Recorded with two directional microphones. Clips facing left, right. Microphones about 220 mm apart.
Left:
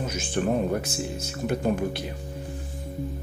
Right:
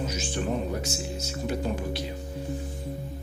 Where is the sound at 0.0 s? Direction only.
55° left (ahead or behind).